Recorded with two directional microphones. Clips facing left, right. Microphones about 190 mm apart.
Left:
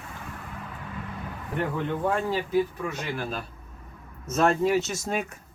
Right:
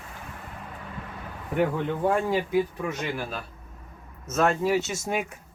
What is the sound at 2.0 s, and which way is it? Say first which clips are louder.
Speech: right 3 dB; 10° right (ahead or behind).